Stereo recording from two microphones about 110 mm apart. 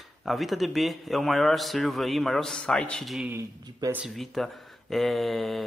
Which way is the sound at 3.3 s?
25° right (ahead or behind).